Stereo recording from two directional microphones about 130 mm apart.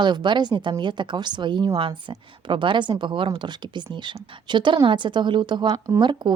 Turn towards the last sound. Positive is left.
turn(degrees=-35)  # may be behind; listen again after turning